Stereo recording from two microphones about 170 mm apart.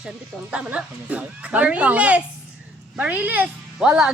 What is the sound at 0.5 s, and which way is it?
Speech, 5° right (ahead or behind).